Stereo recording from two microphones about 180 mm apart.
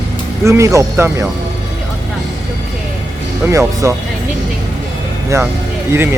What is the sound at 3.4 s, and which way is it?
Speech, 15° right (ahead or behind).